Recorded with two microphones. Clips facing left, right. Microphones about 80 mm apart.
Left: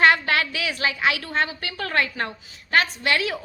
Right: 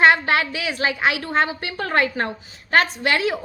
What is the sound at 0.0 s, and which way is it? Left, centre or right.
A woman's voice, right.